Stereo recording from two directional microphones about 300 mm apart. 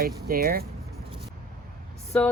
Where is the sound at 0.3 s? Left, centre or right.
Right.